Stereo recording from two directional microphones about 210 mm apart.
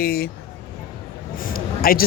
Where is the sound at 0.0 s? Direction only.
45° left (ahead or behind).